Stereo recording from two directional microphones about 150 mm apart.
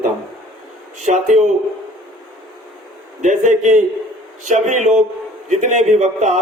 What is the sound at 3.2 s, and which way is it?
A man's voice, 55° right (ahead or behind).